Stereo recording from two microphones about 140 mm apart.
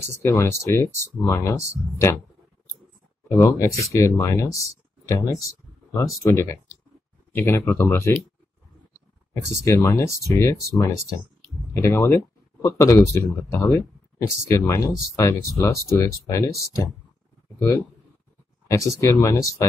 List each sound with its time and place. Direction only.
0.1 s speech: 20° left (ahead or behind)
3.3 s speech: 20° left (ahead or behind)
9.3 s speech: 20° left (ahead or behind)